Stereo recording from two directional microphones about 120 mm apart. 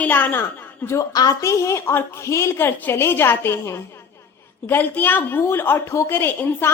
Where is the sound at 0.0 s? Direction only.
15° left (ahead or behind).